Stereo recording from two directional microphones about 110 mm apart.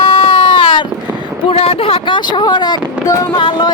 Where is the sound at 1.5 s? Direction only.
60° left (ahead or behind); by 3.3 s 30° left (ahead or behind).